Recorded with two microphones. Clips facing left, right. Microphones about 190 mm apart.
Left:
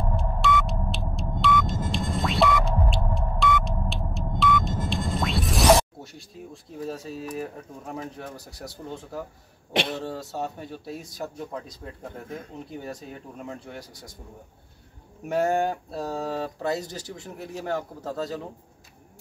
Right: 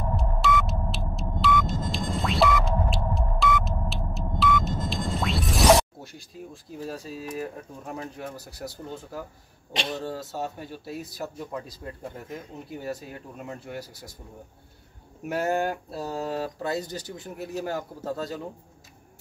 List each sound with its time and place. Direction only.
0.1 s sonar: centre (ahead or behind)
6.9 s speech: centre (ahead or behind)
9.7 s speech: 60° left (ahead or behind)
10.0 s speech: centre (ahead or behind)
15.2 s speech: 5° right (ahead or behind)